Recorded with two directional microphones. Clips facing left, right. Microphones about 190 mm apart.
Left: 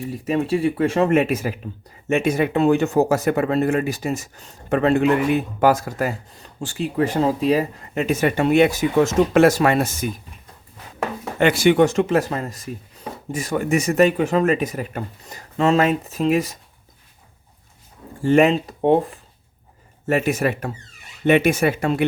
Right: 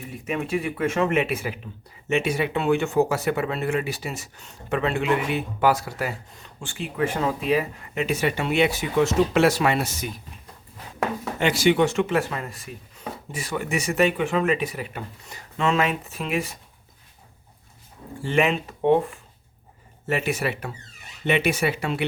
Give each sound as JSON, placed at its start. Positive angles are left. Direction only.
{"t": 0.1, "sound": "speech", "side_deg": 35}
{"t": 11.3, "sound": "speech", "side_deg": 55}
{"t": 18.2, "sound": "speech", "side_deg": 40}